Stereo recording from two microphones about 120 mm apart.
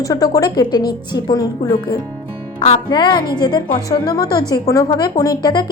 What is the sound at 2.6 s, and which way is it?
A woman's voice, 50° left (ahead or behind).